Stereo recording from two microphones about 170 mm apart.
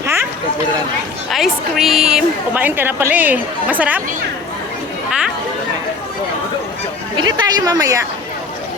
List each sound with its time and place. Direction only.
0.0 s a sound: 15° right (ahead or behind)
1.3 s a woman's voice: centre (ahead or behind)
7.2 s a woman's voice: 25° right (ahead or behind)